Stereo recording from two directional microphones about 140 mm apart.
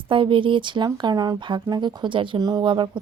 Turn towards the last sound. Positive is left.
turn(degrees=-35)  # may be behind; listen again after turning